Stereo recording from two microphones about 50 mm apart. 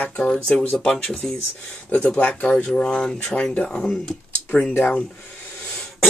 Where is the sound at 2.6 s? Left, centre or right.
Centre.